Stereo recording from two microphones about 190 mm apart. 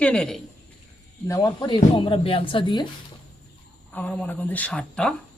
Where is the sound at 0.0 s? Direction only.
5° left (ahead or behind).